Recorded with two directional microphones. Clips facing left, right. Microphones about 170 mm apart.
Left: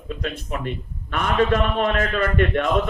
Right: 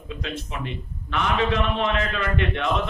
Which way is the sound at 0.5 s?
50° left (ahead or behind).